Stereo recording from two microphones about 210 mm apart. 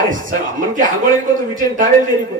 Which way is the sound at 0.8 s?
20° left (ahead or behind).